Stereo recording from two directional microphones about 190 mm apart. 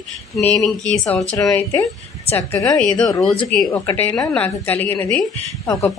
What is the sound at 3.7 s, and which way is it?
A woman's voice, 10° left (ahead or behind).